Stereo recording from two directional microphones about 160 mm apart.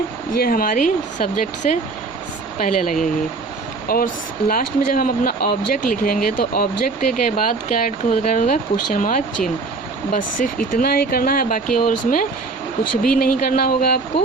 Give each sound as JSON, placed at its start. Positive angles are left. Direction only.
{"t": 0.3, "sound": "speech", "side_deg": 65}